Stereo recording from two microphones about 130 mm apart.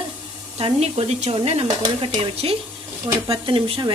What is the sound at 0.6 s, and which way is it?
Speech, 55° right (ahead or behind).